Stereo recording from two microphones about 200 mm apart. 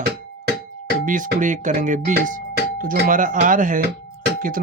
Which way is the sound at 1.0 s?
40° right (ahead or behind).